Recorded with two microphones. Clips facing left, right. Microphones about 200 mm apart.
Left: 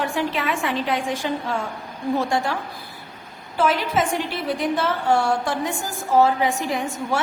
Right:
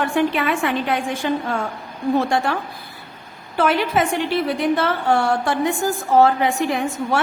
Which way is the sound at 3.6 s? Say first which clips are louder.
Right 2 dB; 60° right (ahead or behind).